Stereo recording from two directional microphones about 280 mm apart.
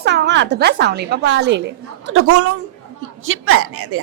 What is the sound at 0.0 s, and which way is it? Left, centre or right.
A woman's voice, right.